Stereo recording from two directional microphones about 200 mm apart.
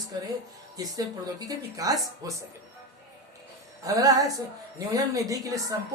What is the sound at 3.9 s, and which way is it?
Speech, 20° right (ahead or behind).